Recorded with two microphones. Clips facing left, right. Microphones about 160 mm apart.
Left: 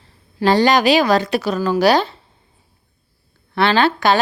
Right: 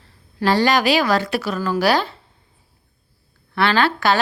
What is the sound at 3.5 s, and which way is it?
Speech, 20° left (ahead or behind).